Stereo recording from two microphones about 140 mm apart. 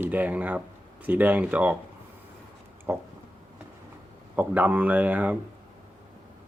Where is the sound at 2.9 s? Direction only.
15° right (ahead or behind).